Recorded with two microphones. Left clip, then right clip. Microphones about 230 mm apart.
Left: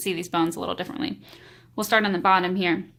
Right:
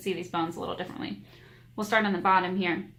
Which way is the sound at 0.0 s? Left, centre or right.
Left.